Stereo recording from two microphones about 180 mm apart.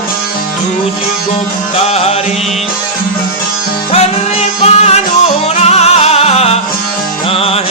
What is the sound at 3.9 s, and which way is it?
Music, 35° left (ahead or behind).